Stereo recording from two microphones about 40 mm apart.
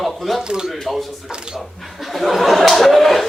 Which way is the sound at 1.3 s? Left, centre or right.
Centre.